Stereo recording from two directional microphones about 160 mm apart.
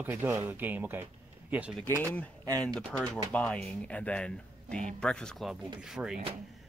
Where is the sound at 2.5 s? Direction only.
5° left (ahead or behind).